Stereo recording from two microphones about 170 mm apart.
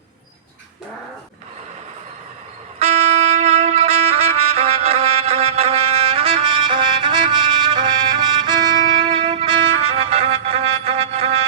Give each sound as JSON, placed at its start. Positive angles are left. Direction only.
{"t": 2.7, "sound": "music", "side_deg": -40}